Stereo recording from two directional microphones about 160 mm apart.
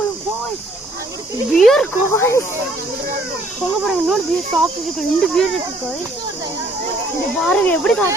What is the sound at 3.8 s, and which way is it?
Speech, centre (ahead or behind).